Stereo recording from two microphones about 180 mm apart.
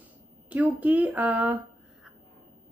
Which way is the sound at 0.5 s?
10° right (ahead or behind).